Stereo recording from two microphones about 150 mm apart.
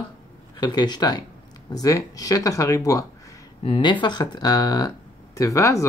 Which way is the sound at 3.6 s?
35° left (ahead or behind).